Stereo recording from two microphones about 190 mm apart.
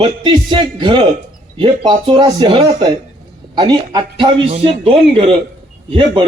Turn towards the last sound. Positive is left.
turn(degrees=-25)  # may be behind; listen again after turning